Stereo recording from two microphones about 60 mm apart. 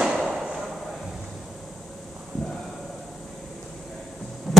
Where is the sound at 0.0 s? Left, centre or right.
Centre.